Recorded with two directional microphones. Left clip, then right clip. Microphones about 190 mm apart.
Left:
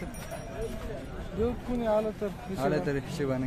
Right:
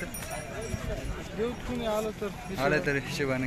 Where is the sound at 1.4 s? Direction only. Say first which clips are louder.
Left 2 dB; 70° left (ahead or behind).